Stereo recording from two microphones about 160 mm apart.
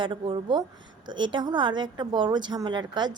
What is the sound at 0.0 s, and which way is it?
A woman's voice, 30° right (ahead or behind).